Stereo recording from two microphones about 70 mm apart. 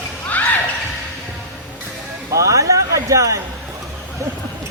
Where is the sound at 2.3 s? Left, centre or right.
Right.